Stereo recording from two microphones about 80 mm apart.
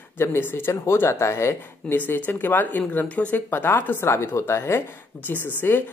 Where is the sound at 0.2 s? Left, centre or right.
Left.